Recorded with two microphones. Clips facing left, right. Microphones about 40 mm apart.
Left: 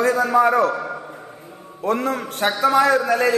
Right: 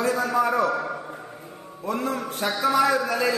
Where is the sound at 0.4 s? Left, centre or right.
Left.